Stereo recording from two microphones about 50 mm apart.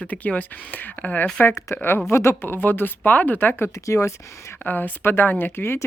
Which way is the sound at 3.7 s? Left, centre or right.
Left.